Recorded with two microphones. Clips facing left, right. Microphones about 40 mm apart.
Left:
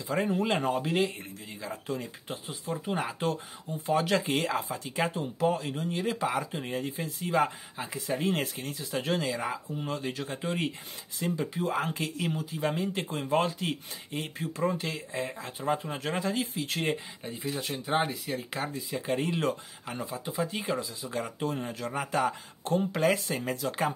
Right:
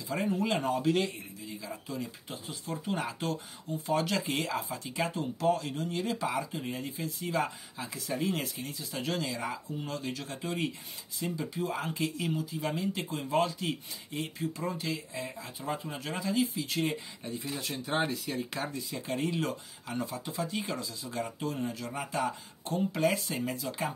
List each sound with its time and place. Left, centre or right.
0.1 s speech: left
2.7 s speech: left
5.4 s speech: left
17.6 s speech: left
18.7 s speech: left